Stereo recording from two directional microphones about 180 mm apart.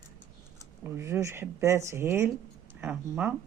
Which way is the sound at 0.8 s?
15° right (ahead or behind).